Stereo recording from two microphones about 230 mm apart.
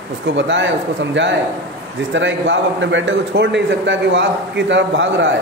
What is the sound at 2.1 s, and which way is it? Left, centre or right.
A man's voice, right.